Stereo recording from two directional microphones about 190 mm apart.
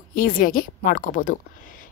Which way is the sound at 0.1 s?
45° left (ahead or behind).